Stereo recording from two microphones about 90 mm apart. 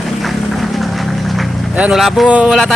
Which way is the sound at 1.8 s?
10° right (ahead or behind).